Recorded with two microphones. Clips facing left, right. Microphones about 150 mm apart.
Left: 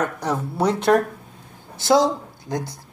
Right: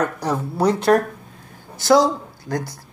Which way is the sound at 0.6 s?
25° left (ahead or behind).